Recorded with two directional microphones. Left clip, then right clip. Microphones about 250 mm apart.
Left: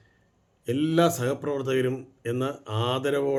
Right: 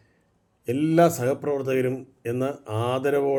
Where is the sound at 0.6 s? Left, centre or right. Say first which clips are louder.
Right 3 dB; centre.